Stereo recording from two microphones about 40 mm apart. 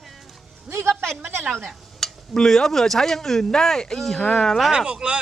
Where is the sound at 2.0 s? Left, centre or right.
Centre.